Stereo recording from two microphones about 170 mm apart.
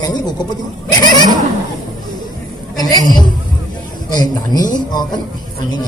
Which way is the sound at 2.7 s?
20° left (ahead or behind).